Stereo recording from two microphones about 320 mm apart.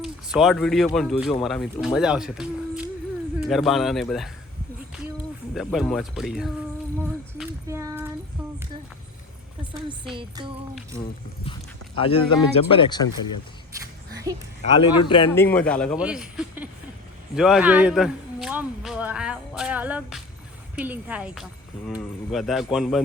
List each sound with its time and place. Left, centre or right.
0.0 s speech: centre
5.5 s speech: centre
7.3 s a sound: centre
10.2 s music: centre
11.9 s speech: centre
13.7 s a sound: centre
14.6 s speech: centre
17.3 s a sound: centre
20.7 s speech: centre